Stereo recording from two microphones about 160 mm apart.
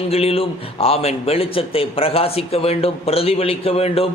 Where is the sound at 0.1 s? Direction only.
40° left (ahead or behind).